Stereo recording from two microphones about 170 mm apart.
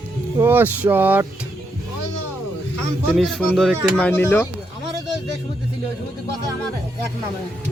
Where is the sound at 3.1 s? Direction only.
Centre (ahead or behind).